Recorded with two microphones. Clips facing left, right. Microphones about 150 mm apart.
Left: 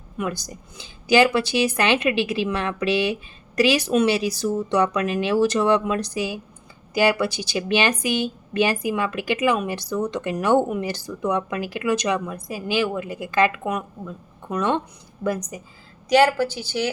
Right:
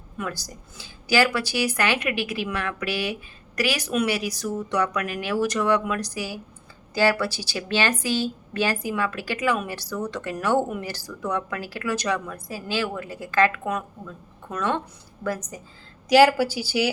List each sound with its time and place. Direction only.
0.2 s a woman's voice: 20° left (ahead or behind)
16.0 s speech: 5° right (ahead or behind)